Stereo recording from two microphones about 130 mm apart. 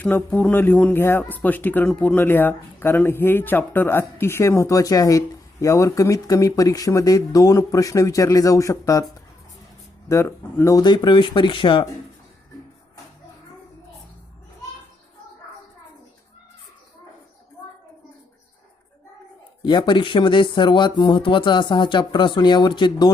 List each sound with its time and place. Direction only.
0.0 s speech: 15° left (ahead or behind)
10.1 s speech: 20° left (ahead or behind); by 11.9 s 40° left (ahead or behind)
19.6 s speech: 35° left (ahead or behind)